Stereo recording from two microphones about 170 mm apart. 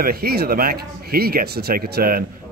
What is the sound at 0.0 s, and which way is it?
Speech, 65° right (ahead or behind).